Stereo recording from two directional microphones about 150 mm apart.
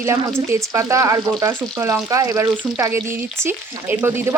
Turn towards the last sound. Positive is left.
turn(degrees=-15)  # may be behind; listen again after turning